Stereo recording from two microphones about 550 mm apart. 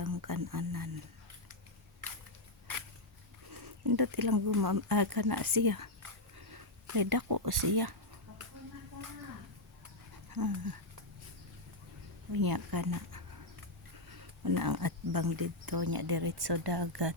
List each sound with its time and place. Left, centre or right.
0.0 s a sound: right
3.5 s speech: right
10.2 s speech: right
12.3 s speech: right